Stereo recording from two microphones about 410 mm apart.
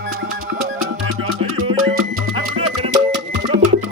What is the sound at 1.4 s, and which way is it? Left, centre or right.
Music, centre.